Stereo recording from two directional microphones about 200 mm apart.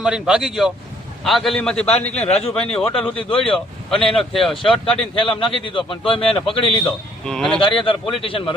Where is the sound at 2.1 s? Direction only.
30° left (ahead or behind).